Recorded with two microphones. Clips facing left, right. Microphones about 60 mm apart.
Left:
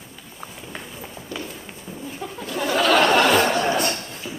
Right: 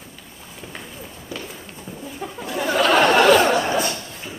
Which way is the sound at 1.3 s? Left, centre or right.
Centre.